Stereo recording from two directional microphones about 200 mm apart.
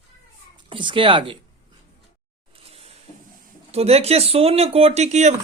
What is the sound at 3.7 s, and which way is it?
Speech, 30° right (ahead or behind).